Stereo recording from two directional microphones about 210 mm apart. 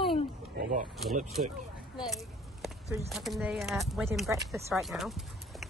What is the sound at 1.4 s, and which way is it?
Speech, 35° right (ahead or behind).